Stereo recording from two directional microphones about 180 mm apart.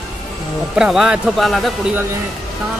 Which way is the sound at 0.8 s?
5° right (ahead or behind).